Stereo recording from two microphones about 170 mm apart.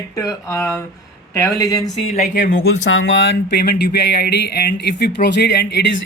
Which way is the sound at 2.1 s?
40° left (ahead or behind).